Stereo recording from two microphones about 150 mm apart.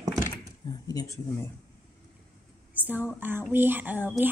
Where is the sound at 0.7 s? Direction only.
25° left (ahead or behind).